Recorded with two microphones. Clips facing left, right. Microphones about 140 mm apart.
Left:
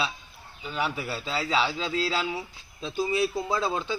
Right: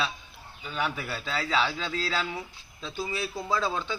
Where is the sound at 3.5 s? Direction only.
35° left (ahead or behind).